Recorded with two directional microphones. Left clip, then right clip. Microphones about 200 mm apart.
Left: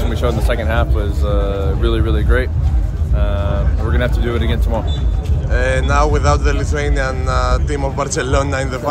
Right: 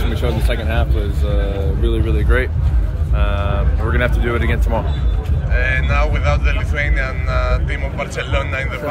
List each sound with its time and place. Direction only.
0.3 s speech: 5° left (ahead or behind)
5.5 s speech: 15° left (ahead or behind)